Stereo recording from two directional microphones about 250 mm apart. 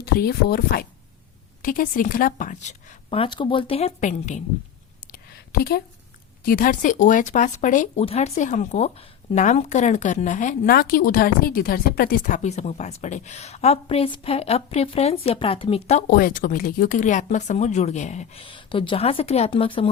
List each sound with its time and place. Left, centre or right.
0.0 s speech: left
5.1 s a sound: left
6.4 s speech: left